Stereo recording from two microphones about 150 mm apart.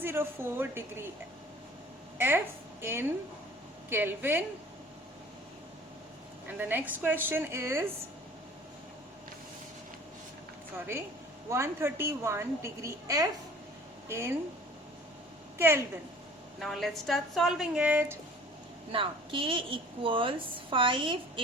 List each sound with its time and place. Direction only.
0.0 s a woman's voice: 15° right (ahead or behind)
2.1 s a woman's voice: 15° right (ahead or behind)
6.6 s a woman's voice: 10° right (ahead or behind)
11.4 s a woman's voice: 20° right (ahead or behind)
15.5 s a woman's voice: 15° right (ahead or behind)
16.6 s a woman's voice: centre (ahead or behind)
18.9 s a woman's voice: 35° right (ahead or behind)